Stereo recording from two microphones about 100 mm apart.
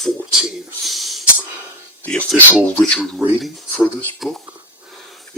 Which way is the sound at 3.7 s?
15° left (ahead or behind).